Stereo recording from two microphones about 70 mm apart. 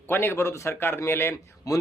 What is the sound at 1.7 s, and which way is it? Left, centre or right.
Speech, left.